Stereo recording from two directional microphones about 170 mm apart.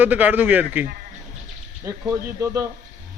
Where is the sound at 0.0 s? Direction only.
10° right (ahead or behind).